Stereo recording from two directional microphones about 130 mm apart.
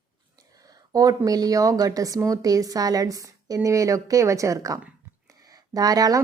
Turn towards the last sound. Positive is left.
turn(degrees=-30)  # may be behind; listen again after turning